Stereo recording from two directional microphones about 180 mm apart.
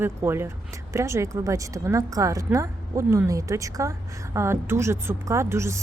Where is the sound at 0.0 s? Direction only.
15° right (ahead or behind).